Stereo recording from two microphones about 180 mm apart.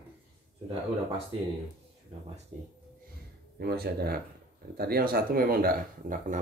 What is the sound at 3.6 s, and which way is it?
Speech, 60° right (ahead or behind).